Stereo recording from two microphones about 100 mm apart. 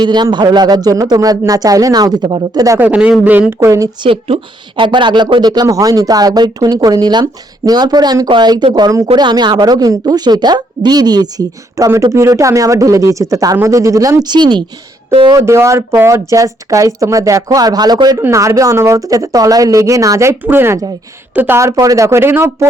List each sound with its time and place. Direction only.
0.0 s speech: 45° right (ahead or behind)
2.7 s a man's voice: 15° right (ahead or behind)
4.0 s speech: 60° right (ahead or behind); by 11.9 s 40° right (ahead or behind)
12.1 s speech: 30° right (ahead or behind); by 14.6 s 50° right (ahead or behind)
15.4 s speech: 30° right (ahead or behind)
18.2 s speech: 30° right (ahead or behind)
20.4 s speech: 20° right (ahead or behind)